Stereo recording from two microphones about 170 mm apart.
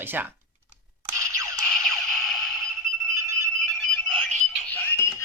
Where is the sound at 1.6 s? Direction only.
Centre (ahead or behind).